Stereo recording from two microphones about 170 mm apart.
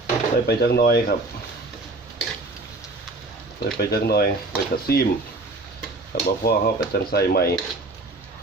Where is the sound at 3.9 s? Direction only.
65° left (ahead or behind).